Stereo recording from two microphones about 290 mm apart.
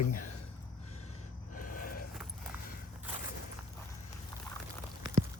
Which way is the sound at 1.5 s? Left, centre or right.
Left.